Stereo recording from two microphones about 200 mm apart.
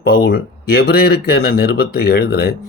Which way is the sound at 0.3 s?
50° left (ahead or behind).